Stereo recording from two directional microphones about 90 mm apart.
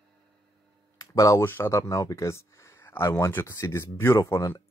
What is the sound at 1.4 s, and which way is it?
Speech, 25° left (ahead or behind).